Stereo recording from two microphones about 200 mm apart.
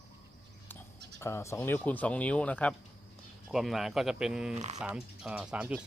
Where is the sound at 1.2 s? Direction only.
15° left (ahead or behind).